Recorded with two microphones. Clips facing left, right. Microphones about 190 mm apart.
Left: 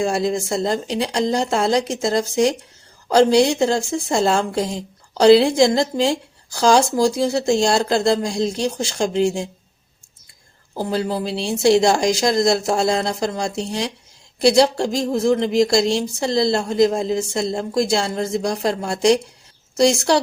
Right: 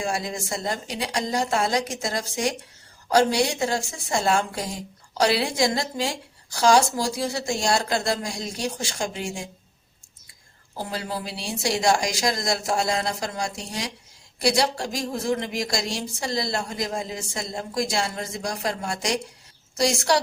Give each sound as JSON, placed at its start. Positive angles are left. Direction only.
{"t": 0.1, "sound": "speech", "side_deg": 25}
{"t": 11.3, "sound": "speech", "side_deg": 25}